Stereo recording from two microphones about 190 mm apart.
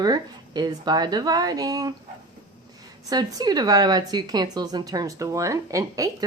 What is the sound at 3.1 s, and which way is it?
A woman's voice, 20° right (ahead or behind).